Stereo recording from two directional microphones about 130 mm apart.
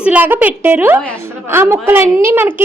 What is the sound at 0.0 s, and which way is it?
A woman's voice, 10° right (ahead or behind).